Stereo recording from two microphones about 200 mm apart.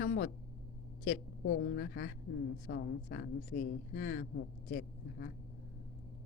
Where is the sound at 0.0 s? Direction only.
60° left (ahead or behind).